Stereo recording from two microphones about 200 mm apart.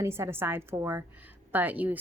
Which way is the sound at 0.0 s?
15° right (ahead or behind).